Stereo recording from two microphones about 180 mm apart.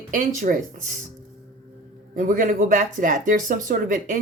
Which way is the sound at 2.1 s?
50° right (ahead or behind).